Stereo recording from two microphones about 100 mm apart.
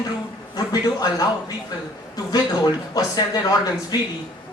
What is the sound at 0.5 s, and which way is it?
Speech, 40° left (ahead or behind).